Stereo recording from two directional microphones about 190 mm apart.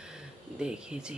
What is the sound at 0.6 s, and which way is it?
Speech, 5° right (ahead or behind).